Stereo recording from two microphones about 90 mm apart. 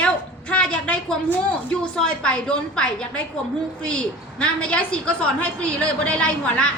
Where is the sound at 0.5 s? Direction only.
10° left (ahead or behind).